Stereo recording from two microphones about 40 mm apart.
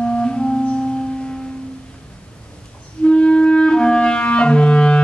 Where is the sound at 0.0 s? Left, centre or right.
Left.